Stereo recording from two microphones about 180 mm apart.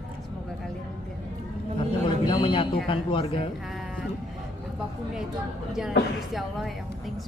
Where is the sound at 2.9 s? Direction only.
30° left (ahead or behind).